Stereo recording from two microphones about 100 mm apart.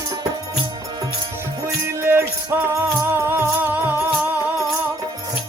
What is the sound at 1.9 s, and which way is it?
Music, 25° right (ahead or behind).